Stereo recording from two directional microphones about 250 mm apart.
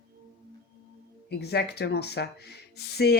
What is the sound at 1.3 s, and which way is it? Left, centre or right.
Speech, left.